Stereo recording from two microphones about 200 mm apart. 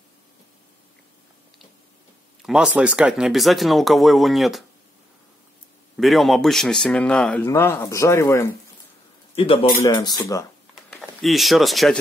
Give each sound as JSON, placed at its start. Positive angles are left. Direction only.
{"t": 2.4, "sound": "speech", "side_deg": -5}
{"t": 5.9, "sound": "speech", "side_deg": 0}
{"t": 9.3, "sound": "speech", "side_deg": 25}
{"t": 10.9, "sound": "speech", "side_deg": 0}